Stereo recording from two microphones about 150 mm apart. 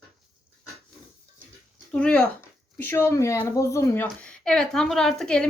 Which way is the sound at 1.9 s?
10° left (ahead or behind).